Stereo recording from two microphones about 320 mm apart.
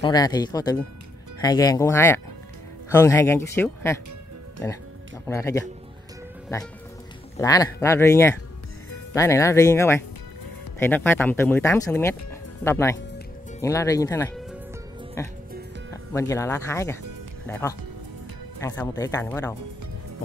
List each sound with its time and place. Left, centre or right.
0.0 s speech: centre
7.3 s speech: centre